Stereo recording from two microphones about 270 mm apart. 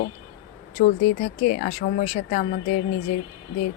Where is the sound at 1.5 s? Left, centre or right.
Left.